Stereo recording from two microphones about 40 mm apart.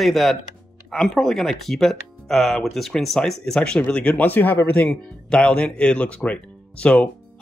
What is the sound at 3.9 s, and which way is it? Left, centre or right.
Speech, left.